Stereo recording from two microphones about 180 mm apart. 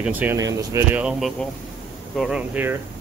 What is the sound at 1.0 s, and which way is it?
Speech, centre (ahead or behind).